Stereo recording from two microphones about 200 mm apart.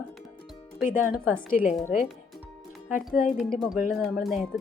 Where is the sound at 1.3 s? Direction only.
40° left (ahead or behind).